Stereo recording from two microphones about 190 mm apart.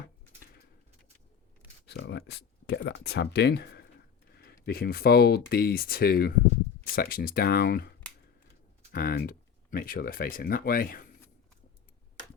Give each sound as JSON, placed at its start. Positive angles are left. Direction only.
{"t": 1.9, "sound": "speech", "side_deg": 65}